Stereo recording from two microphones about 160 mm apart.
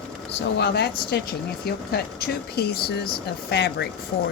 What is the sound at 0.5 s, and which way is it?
Speech, 90° left.